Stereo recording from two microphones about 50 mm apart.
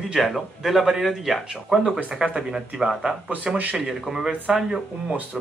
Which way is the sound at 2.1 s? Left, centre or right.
Centre.